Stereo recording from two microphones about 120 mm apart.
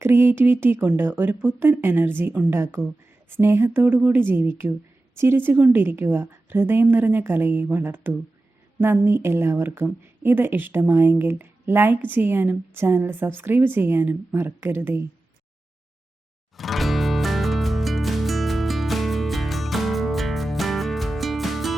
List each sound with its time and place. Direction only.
0.0 s a woman's voice: 20° right (ahead or behind)
16.6 s music: centre (ahead or behind)